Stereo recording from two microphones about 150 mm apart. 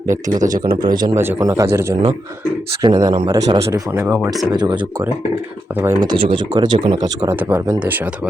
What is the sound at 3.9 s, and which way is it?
Speech, 10° right (ahead or behind).